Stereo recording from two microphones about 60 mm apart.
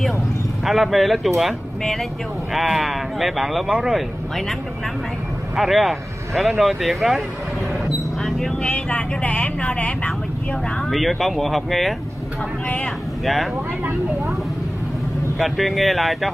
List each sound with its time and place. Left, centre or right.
0.7 s speech: centre
5.6 s speech: centre
7.8 s a sound: centre
8.7 s speech: left
10.9 s speech: centre
12.6 s speech: left
13.2 s speech: centre
15.3 s speech: centre